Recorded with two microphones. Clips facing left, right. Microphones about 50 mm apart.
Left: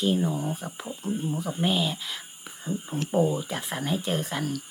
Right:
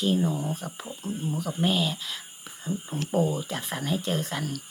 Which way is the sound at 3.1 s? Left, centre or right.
Centre.